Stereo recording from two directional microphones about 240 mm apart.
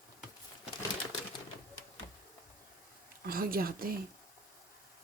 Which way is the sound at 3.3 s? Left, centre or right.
Right.